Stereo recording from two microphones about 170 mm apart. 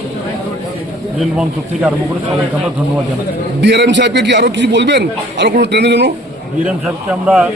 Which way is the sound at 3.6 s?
90° right.